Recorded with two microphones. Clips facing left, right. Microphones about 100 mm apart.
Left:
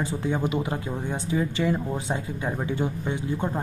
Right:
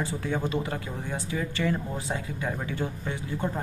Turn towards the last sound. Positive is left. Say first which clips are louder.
# left 4 dB
turn(degrees=15)  # may be behind; listen again after turning